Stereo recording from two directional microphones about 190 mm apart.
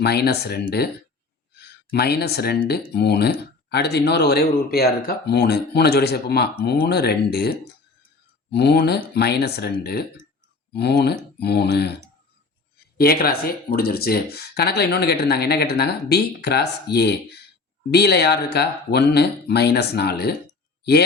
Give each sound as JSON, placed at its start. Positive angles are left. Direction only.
{"t": 0.0, "sound": "speech", "side_deg": 60}
{"t": 13.0, "sound": "speech", "side_deg": 50}